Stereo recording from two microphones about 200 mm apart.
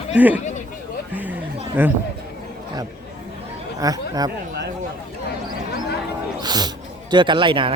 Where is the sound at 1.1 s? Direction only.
10° right (ahead or behind).